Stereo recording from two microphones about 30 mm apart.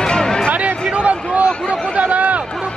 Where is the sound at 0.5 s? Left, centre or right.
Right.